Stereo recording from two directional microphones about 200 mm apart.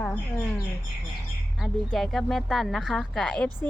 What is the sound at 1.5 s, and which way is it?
Speech, centre (ahead or behind).